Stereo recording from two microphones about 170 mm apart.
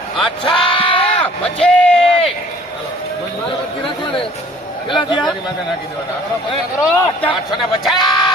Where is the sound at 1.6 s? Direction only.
5° left (ahead or behind).